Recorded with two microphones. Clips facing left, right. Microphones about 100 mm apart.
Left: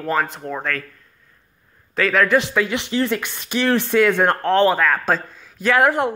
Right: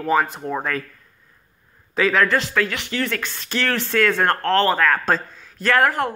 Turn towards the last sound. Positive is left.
turn(degrees=10)  # may be behind; listen again after turning